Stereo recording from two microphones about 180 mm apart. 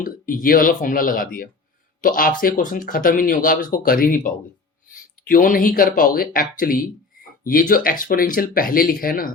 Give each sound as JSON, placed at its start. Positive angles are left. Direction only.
{"t": 0.0, "sound": "speech", "side_deg": 50}